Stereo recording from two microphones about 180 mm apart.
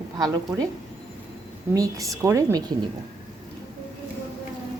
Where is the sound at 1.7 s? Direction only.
20° right (ahead or behind).